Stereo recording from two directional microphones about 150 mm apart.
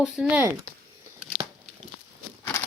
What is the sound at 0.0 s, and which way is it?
Speech, 5° right (ahead or behind).